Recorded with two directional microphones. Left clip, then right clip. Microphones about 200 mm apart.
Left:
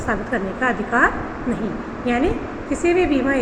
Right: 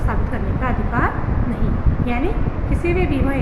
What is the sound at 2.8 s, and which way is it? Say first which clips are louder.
Speech: left 4 dB; 20° left (ahead or behind).